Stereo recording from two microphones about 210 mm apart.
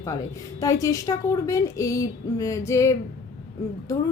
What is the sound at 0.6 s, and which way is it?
A woman's voice, 15° left (ahead or behind).